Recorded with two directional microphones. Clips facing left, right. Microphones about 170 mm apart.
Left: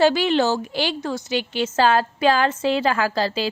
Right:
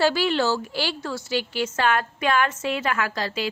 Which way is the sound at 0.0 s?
20° left (ahead or behind).